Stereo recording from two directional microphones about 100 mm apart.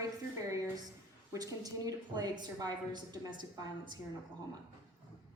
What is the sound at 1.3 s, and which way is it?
A woman's voice, 35° right (ahead or behind).